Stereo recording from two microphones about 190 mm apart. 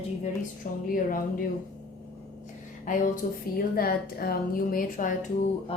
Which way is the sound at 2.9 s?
40° left (ahead or behind).